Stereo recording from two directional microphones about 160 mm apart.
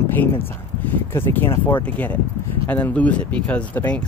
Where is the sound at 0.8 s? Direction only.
10° left (ahead or behind).